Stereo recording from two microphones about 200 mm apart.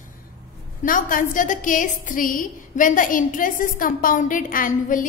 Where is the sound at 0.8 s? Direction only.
45° left (ahead or behind).